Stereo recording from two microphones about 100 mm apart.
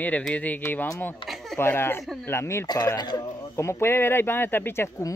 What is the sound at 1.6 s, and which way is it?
Speech, 25° left (ahead or behind).